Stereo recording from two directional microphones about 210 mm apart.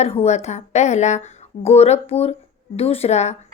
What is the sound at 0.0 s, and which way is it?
A woman's voice, 30° left (ahead or behind).